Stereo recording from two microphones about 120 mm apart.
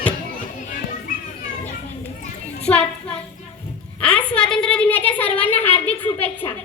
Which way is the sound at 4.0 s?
10° left (ahead or behind).